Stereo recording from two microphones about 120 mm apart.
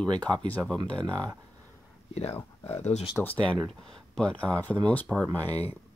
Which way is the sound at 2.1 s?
60° left (ahead or behind).